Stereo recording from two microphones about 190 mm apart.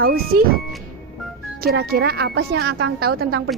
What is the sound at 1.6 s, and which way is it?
Speech, 55° right (ahead or behind).